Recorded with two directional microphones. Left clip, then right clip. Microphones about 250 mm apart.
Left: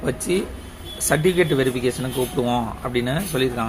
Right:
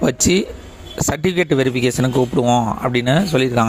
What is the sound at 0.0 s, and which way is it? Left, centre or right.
Speech, right.